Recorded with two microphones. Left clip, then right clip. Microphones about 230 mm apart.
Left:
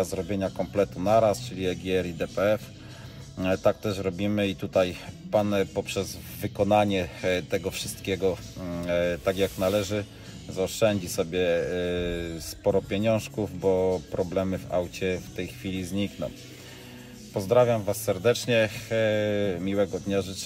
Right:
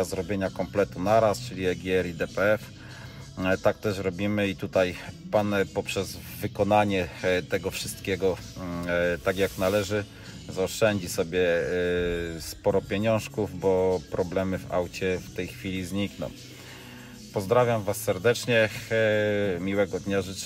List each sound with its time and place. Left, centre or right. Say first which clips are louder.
0.0 s speech: even; right
17.3 s speech: left 1 dB; right